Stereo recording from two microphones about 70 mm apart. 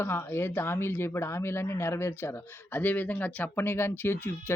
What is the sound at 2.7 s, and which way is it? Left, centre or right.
Speech, left.